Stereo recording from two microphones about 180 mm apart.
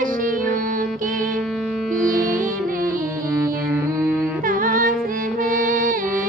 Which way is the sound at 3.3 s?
15° right (ahead or behind).